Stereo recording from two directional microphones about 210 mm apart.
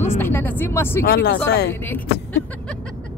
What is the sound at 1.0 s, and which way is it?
Speech, 50° left (ahead or behind).